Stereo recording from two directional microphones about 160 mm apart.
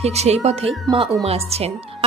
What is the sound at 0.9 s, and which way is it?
Speech, 25° right (ahead or behind).